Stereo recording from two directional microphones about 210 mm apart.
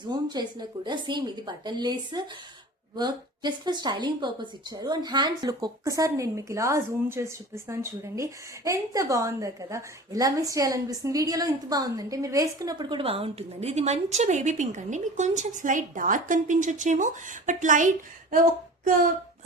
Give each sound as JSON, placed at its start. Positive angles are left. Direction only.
{"t": 0.1, "sound": "a woman's voice", "side_deg": -20}